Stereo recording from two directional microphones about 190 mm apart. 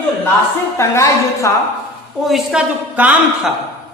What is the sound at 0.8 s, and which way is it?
Speech, 15° left (ahead or behind).